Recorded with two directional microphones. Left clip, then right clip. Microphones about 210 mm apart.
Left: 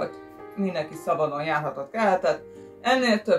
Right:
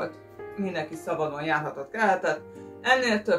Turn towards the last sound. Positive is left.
turn(degrees=0)  # may be behind; listen again after turning